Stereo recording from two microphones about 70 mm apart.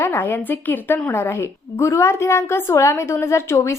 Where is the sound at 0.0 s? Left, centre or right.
Left.